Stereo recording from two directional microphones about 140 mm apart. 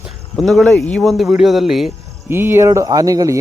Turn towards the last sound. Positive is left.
turn(degrees=-25)  # may be behind; listen again after turning